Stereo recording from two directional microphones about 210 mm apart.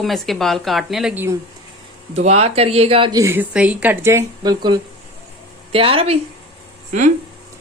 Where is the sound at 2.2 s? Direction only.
30° right (ahead or behind).